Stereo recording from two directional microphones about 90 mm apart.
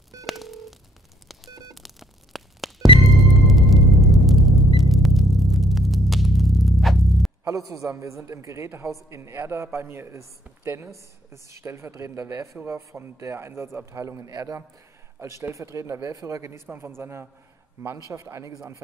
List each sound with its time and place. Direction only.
0.3 s telephone dialing: centre (ahead or behind)
1.8 s a sound: centre (ahead or behind)
3.1 s music: centre (ahead or behind)
7.4 s speech: 40° right (ahead or behind)